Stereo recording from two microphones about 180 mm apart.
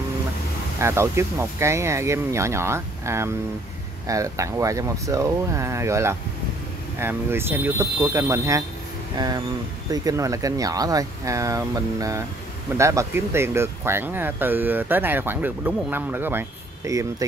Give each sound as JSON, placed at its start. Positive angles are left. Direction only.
{"t": 0.7, "sound": "speech", "side_deg": -15}